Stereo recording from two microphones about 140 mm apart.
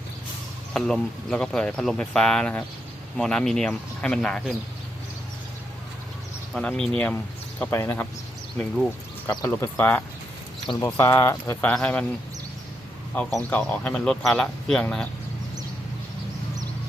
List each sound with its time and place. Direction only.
0.7 s speech: 5° left (ahead or behind)
6.5 s speech: 5° left (ahead or behind)
8.5 s speech: 5° left (ahead or behind)
9.5 s speech: 15° left (ahead or behind)
11.7 s speech: 5° left (ahead or behind)
13.5 s speech: 10° left (ahead or behind)